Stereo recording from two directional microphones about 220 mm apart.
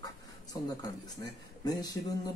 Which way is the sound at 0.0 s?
15° left (ahead or behind).